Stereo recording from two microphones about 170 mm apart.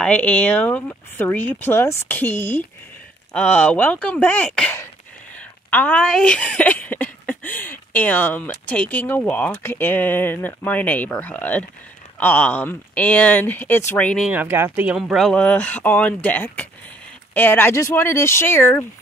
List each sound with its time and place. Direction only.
0.0 s speech: 5° left (ahead or behind)
14.3 s speech: 10° right (ahead or behind); by 18.9 s 15° left (ahead or behind)